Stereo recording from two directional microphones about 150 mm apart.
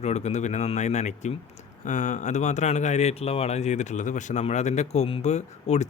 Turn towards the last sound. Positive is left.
turn(degrees=50)  # may be behind; listen again after turning